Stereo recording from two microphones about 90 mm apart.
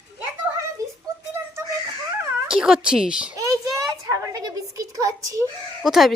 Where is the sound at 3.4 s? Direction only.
40° right (ahead or behind).